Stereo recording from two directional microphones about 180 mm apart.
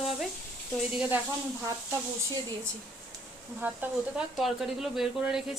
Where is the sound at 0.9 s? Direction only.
5° right (ahead or behind).